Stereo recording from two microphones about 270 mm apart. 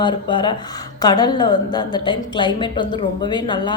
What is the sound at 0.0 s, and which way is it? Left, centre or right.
Speech, centre.